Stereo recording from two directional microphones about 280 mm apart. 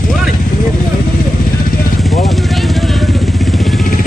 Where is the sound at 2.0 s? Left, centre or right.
Centre.